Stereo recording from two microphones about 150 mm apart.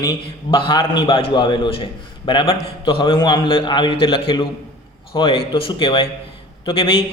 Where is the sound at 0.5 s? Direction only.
35° left (ahead or behind).